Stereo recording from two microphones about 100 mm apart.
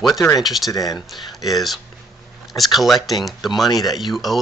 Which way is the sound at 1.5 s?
Centre (ahead or behind).